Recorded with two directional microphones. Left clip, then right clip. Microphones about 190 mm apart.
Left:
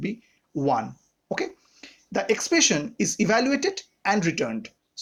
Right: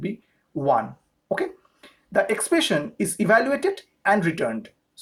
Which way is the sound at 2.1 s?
25° left (ahead or behind).